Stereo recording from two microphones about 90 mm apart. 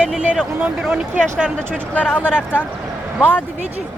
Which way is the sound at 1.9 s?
15° left (ahead or behind).